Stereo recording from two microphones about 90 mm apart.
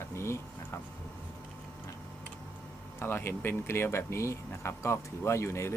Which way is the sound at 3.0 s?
25° left (ahead or behind).